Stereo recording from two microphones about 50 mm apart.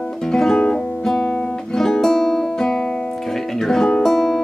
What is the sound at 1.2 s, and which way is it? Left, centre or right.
Guitar, left.